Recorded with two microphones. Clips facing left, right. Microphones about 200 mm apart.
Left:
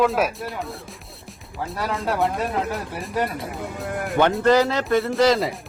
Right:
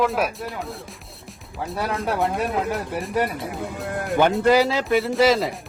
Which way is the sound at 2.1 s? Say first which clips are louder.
Even; centre (ahead or behind).